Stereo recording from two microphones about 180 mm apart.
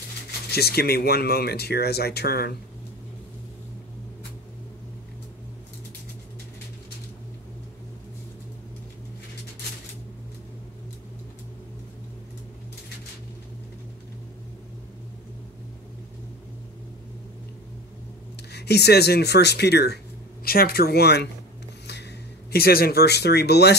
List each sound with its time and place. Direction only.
0.5 s speech: 60° left (ahead or behind)
18.5 s speech: 65° left (ahead or behind)
22.5 s speech: 60° left (ahead or behind)